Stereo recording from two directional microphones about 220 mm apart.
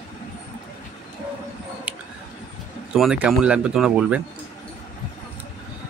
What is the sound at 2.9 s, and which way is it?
Speech, 5° right (ahead or behind).